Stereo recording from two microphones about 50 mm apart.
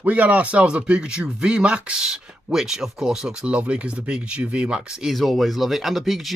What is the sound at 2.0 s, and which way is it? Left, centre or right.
Speech, centre.